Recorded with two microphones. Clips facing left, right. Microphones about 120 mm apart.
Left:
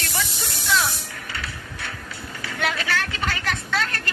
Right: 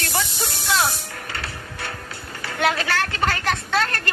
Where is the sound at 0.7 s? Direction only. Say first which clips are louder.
Right 1 dB; 50° right (ahead or behind).